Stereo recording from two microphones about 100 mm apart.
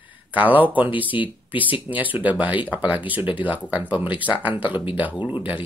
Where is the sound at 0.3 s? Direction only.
15° right (ahead or behind).